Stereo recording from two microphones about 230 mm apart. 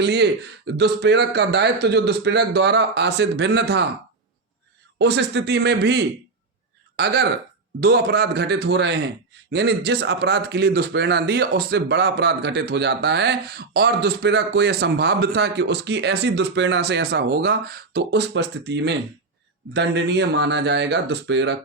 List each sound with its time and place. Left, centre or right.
0.0 s speech: right
4.9 s speech: right